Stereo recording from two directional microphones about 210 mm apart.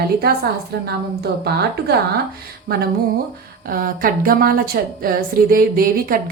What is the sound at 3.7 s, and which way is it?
A woman's voice, 45° right (ahead or behind).